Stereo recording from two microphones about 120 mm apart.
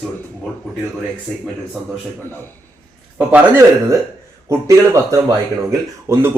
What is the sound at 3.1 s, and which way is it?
Speech, 15° right (ahead or behind).